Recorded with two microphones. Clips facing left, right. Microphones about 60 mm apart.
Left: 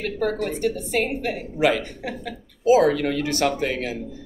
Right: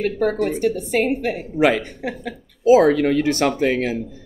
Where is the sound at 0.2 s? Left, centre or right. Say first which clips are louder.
Right 2 dB; right.